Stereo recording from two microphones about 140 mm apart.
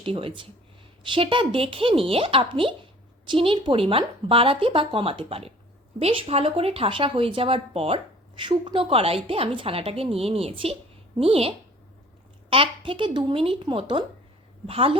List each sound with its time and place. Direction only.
0.0 s a woman's voice: 40° right (ahead or behind)